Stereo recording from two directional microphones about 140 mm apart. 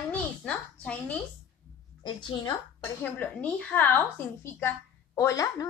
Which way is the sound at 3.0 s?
10° left (ahead or behind).